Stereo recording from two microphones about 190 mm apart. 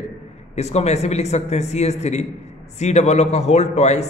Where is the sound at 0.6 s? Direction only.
35° left (ahead or behind).